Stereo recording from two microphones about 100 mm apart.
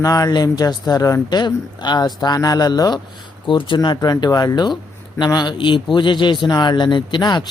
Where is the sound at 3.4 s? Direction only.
55° left (ahead or behind).